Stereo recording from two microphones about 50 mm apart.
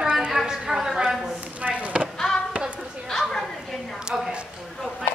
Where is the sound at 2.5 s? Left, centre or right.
Right.